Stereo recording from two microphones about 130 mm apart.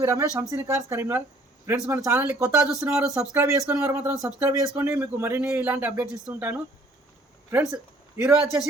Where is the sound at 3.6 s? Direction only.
20° right (ahead or behind).